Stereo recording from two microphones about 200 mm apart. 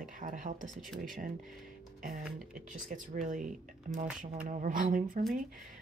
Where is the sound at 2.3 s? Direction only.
40° right (ahead or behind).